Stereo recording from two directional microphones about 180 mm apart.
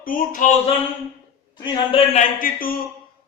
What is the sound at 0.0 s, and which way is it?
Speech, 50° left (ahead or behind).